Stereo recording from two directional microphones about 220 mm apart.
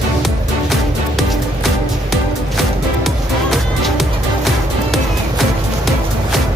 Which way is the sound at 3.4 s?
Centre (ahead or behind).